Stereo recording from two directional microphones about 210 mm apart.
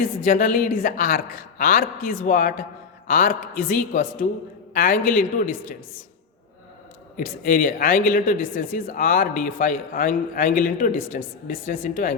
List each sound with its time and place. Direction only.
0.3 s a man's voice: 40° left (ahead or behind)
7.2 s a man's voice: 40° left (ahead or behind)